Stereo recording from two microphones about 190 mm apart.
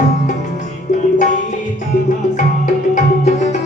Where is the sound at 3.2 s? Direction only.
40° left (ahead or behind).